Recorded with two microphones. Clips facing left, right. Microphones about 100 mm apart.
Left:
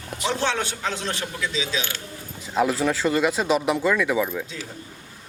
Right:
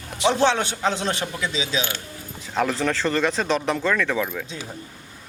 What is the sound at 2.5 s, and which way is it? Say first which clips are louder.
Speech: left 1 dB; 5° left (ahead or behind).